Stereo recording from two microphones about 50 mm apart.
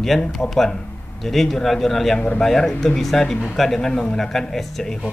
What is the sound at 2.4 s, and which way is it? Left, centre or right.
Speech, centre.